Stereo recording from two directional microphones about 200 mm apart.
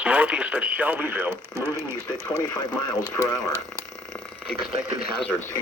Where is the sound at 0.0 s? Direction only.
5° right (ahead or behind).